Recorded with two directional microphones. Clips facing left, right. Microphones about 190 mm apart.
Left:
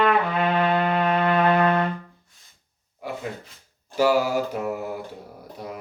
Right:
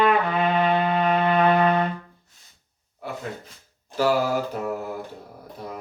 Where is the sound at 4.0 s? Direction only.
10° left (ahead or behind).